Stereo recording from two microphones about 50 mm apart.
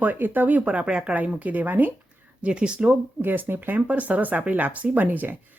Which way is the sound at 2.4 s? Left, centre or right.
Right.